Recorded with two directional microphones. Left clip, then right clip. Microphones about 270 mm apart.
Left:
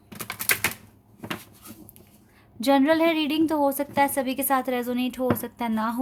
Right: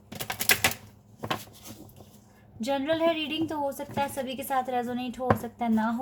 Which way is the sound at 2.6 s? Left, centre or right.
Left.